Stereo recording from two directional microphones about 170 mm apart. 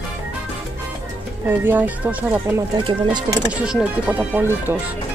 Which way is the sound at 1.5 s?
10° right (ahead or behind).